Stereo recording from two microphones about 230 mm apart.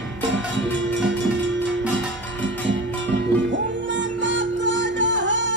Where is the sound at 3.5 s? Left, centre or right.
Right.